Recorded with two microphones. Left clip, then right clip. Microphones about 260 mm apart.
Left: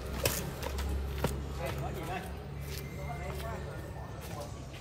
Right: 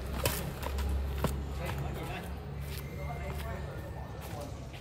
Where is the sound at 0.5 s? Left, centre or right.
Centre.